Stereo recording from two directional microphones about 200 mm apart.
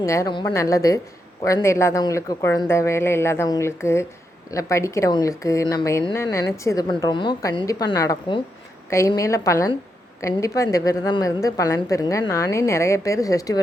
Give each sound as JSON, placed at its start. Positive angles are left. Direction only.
{"t": 0.0, "sound": "speech", "side_deg": 15}